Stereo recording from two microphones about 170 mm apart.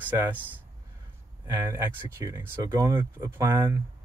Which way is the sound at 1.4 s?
15° right (ahead or behind).